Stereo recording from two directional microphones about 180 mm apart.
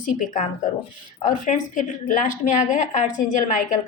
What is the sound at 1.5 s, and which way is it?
A woman's voice, 45° left (ahead or behind).